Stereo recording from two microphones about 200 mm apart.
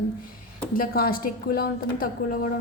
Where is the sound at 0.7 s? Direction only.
45° left (ahead or behind).